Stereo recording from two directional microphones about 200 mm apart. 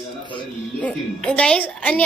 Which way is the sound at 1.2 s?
5° left (ahead or behind).